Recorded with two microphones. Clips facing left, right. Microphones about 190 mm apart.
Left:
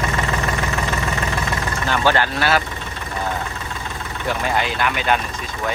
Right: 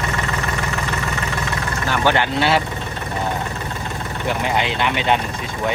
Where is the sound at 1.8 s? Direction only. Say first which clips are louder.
Even; 15° right (ahead or behind).